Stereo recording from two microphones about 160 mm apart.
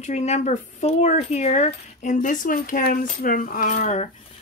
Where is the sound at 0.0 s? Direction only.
45° left (ahead or behind).